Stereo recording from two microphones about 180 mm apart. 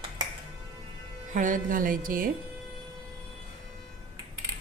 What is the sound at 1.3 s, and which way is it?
Speech, 45° right (ahead or behind).